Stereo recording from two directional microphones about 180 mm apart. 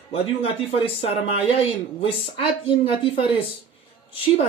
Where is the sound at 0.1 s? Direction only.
30° left (ahead or behind).